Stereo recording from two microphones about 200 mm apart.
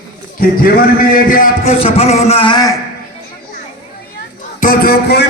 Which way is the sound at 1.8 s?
30° left (ahead or behind).